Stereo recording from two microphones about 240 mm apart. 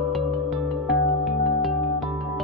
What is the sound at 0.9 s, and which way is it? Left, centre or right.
Music, centre.